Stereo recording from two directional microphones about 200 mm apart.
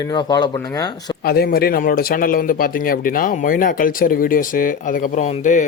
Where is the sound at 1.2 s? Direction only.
50° left (ahead or behind).